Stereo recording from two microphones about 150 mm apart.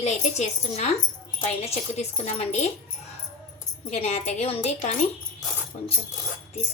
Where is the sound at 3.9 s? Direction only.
45° left (ahead or behind).